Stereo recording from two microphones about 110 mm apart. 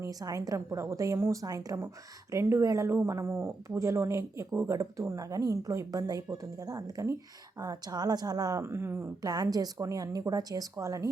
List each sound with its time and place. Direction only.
0.0 s speech: 35° right (ahead or behind)
9.2 s speech: 35° right (ahead or behind)